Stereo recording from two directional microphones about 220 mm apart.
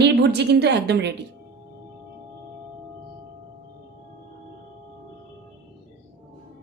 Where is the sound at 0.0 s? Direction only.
50° right (ahead or behind).